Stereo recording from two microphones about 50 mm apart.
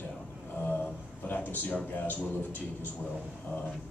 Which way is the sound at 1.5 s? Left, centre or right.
Left.